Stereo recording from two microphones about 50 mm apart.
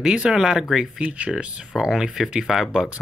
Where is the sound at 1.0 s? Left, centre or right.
Right.